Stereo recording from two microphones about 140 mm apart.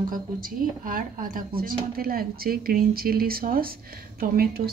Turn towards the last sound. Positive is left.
turn(degrees=-90)